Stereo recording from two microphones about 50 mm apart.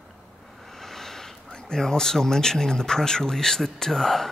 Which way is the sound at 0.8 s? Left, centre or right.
Centre.